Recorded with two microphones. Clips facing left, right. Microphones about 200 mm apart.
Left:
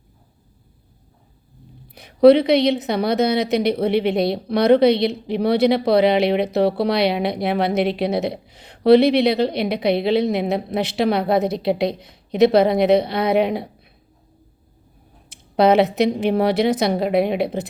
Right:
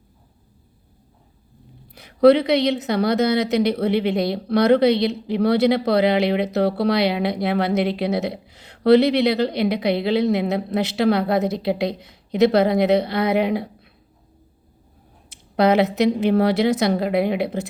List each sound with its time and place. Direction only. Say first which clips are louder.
2.0 s speech: left 2 dB; 20° left (ahead or behind)
15.7 s speech: left 1 dB; 20° left (ahead or behind)